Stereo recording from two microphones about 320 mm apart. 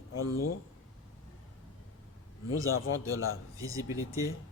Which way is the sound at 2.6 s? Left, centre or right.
Left.